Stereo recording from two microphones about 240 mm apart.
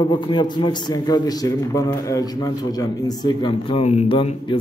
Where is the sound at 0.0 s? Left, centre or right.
Centre.